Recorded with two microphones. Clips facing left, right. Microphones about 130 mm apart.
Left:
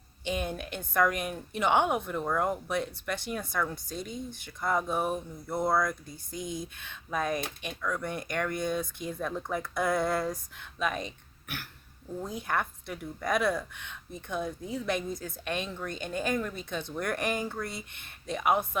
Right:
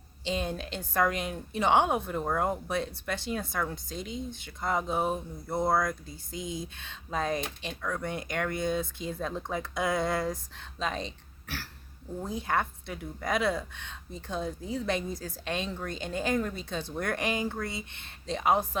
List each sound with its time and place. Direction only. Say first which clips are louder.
0.3 s a sound: right 1 dB; 25° right (ahead or behind)
0.9 s speech: left 1 dB; 25° right (ahead or behind)
3.9 s speech: even; 50° left (ahead or behind)
4.6 s speech: even; 20° right (ahead or behind)